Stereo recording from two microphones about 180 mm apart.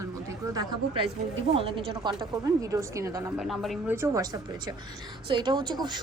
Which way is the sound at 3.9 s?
15° right (ahead or behind).